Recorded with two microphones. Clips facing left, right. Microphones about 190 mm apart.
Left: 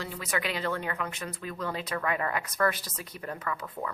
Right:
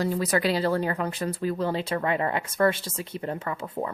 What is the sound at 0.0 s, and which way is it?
Speech, 40° right (ahead or behind).